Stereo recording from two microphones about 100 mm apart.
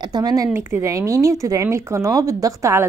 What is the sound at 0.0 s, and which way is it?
Speech, 40° right (ahead or behind).